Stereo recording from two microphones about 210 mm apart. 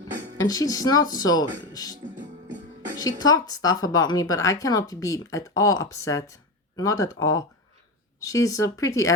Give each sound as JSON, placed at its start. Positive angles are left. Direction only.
{"t": 0.3, "sound": "a woman's voice", "side_deg": 15}
{"t": 2.1, "sound": "music", "side_deg": -35}
{"t": 3.0, "sound": "a woman's voice", "side_deg": 20}